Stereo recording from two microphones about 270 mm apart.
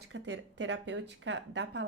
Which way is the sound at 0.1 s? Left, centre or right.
Right.